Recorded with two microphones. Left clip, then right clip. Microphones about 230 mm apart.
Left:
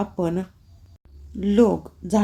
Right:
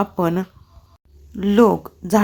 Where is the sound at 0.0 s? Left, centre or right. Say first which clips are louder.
Right 5 dB; centre.